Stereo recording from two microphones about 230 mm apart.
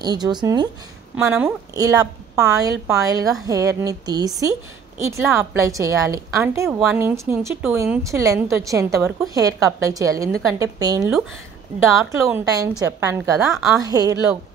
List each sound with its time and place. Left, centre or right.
0.0 s a woman's voice: centre
1.1 s a woman's voice: centre
12.3 s a woman's voice: centre
13.4 s a woman's voice: centre
13.7 s a woman's voice: centre